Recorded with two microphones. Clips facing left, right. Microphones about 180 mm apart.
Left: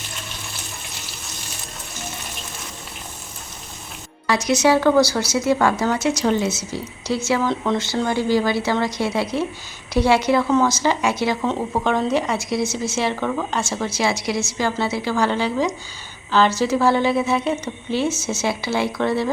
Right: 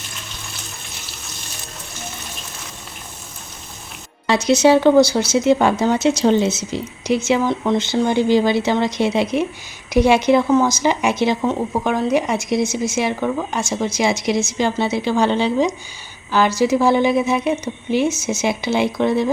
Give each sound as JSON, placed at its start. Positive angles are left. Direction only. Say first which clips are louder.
{"t": 4.3, "sound": "speech", "louder": "right 4 dB", "side_deg": -25}
{"t": 11.4, "sound": "speech", "louder": "right 2 dB", "side_deg": -10}